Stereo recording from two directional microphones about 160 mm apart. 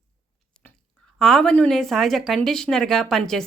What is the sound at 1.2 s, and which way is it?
A woman's voice, 5° left (ahead or behind).